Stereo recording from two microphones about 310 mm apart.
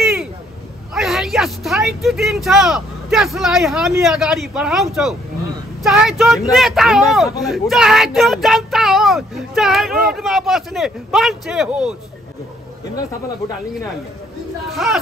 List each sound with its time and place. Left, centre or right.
0.0 s a sound: centre
0.9 s speech: centre
14.7 s speech: centre